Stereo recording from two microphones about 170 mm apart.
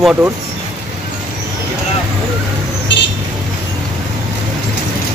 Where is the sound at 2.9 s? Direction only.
90° left.